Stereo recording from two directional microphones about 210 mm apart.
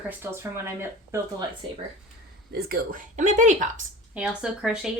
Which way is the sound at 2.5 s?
45° right (ahead or behind).